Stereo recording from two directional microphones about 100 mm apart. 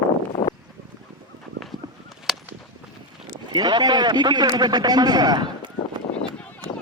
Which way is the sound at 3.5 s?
45° right (ahead or behind).